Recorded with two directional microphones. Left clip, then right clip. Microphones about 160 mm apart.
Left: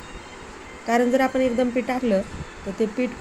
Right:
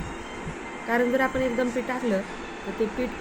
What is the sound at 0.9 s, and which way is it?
Speech, 20° left (ahead or behind).